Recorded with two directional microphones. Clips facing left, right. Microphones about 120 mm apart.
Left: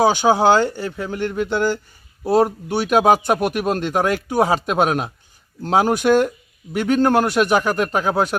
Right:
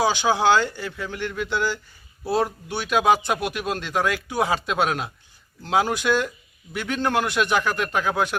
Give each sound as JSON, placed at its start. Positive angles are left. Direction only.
{"t": 0.0, "sound": "speech", "side_deg": 45}